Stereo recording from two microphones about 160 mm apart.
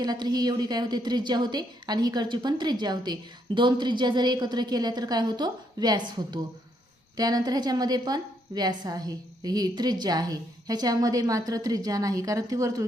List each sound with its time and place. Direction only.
0.0 s a woman's voice: 25° right (ahead or behind)